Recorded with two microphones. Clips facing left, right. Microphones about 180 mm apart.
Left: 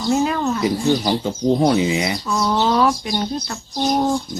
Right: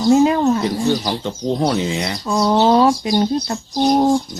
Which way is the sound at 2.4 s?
30° right (ahead or behind).